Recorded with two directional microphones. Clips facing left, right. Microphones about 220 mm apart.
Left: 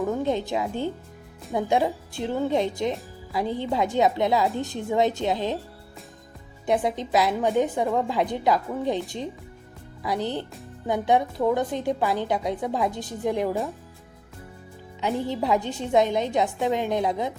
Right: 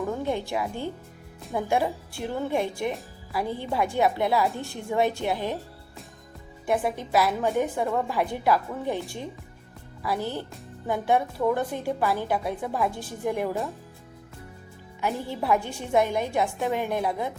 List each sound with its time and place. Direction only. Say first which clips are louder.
0.0 s a woman's voice: left 3 dB; 20° left (ahead or behind)
6.7 s a woman's voice: left 2 dB; 20° left (ahead or behind)
10.0 s a woman's voice: left 2 dB; 20° left (ahead or behind)
15.0 s a woman's voice: left 2 dB; 20° left (ahead or behind)